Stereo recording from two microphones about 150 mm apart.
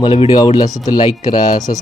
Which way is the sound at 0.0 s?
30° left (ahead or behind).